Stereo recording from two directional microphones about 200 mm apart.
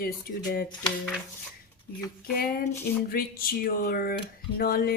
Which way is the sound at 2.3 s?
45° left (ahead or behind).